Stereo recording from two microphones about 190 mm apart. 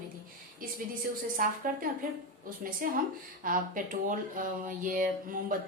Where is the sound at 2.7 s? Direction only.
45° right (ahead or behind).